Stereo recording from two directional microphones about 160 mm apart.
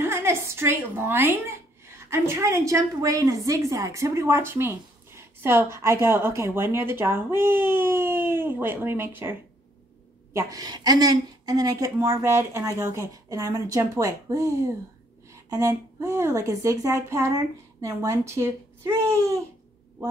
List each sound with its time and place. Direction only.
0.0 s a woman's voice: 15° right (ahead or behind)
15.5 s a woman's voice: 15° right (ahead or behind)